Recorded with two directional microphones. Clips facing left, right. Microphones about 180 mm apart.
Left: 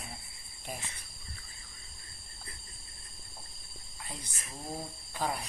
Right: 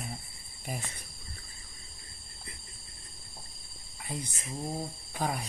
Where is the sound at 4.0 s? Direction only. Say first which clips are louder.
Right 7 dB; 15° right (ahead or behind).